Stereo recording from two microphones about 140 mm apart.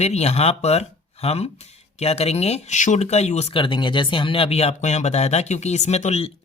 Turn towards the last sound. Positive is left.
turn(degrees=50)  # may be behind; listen again after turning